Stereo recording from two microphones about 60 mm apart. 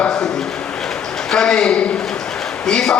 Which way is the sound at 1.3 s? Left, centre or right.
Centre.